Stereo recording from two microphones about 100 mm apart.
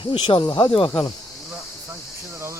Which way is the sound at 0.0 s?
60° left (ahead or behind).